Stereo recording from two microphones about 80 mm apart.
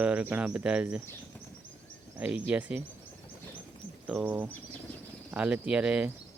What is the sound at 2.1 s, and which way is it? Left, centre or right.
Speech, centre.